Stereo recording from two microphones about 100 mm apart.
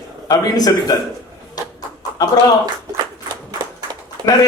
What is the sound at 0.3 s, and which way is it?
Speech, 40° left (ahead or behind).